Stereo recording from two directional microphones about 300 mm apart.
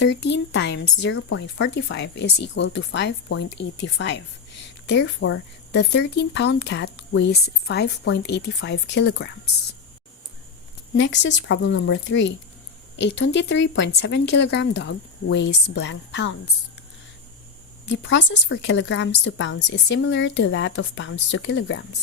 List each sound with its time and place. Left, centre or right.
0.2 s speech: left
10.9 s speech: left
17.9 s speech: left